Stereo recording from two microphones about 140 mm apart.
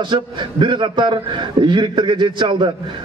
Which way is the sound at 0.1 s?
35° right (ahead or behind).